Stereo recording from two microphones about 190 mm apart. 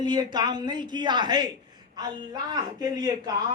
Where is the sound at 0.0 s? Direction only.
20° right (ahead or behind).